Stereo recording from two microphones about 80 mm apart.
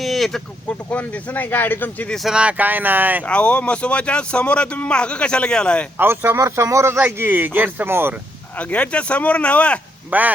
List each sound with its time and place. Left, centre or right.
0.0 s a sound: centre
0.7 s speech: centre
2.0 s speech: centre
2.3 s speech: centre
3.2 s a man's voice: centre
6.0 s speech: right
6.4 s speech: right
7.0 s speech: right
8.5 s a man's voice: centre
10.1 s speech: right